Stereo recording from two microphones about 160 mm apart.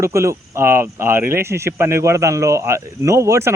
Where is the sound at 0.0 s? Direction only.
15° right (ahead or behind).